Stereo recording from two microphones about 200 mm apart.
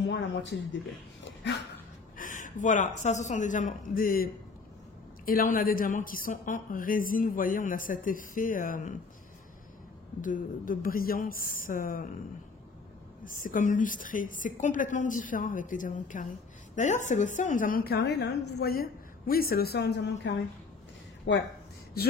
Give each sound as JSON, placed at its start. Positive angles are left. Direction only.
{"t": 0.0, "sound": "speech", "side_deg": 65}
{"t": 1.2, "sound": "dog", "side_deg": 60}
{"t": 2.1, "sound": "a woman's voice", "side_deg": 40}
{"t": 10.2, "sound": "a woman's voice", "side_deg": 45}
{"t": 13.2, "sound": "a woman's voice", "side_deg": 45}